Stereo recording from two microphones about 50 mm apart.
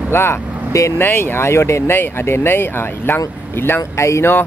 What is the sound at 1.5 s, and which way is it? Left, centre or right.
Speech, left.